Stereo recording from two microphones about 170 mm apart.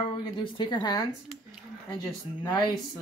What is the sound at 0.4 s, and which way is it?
Speech, 30° left (ahead or behind).